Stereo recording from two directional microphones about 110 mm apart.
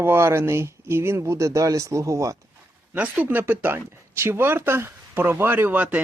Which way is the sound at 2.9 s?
15° right (ahead or behind).